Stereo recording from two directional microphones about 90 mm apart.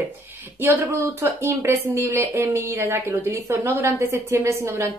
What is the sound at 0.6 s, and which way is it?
Speech, 20° right (ahead or behind).